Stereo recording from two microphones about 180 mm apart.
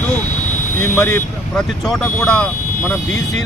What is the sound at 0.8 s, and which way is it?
Speech, 15° left (ahead or behind).